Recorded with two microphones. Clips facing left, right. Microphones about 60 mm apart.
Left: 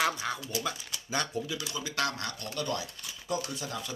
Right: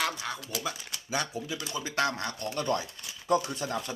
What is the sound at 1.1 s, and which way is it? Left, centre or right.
Speech, centre.